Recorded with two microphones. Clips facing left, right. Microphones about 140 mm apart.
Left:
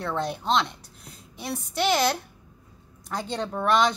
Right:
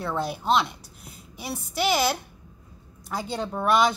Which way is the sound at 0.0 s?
5° right (ahead or behind).